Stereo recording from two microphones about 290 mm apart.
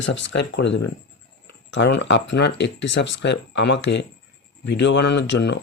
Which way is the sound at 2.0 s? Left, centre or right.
Left.